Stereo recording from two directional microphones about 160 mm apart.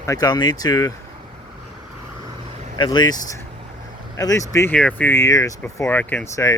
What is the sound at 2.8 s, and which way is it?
Speech, 25° left (ahead or behind).